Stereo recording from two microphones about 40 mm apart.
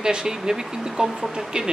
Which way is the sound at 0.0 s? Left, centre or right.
Centre.